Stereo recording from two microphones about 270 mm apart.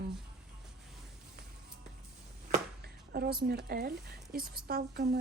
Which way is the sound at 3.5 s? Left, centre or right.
Right.